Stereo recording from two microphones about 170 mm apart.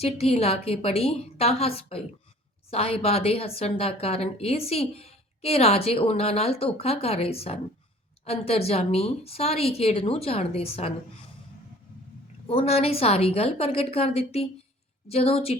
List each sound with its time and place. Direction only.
0.0 s speech: 35° left (ahead or behind)
12.5 s speech: 35° left (ahead or behind)